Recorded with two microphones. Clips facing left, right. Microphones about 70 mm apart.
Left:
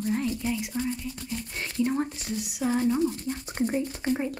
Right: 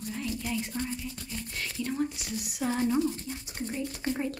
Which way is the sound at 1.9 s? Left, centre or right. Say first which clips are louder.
Left 3 dB; left.